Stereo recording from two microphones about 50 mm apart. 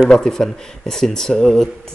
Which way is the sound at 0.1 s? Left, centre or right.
Centre.